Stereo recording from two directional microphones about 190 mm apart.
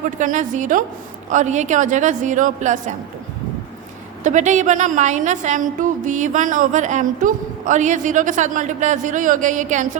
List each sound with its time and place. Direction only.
0.2 s a woman's voice: 40° right (ahead or behind)
4.2 s a woman's voice: 40° right (ahead or behind)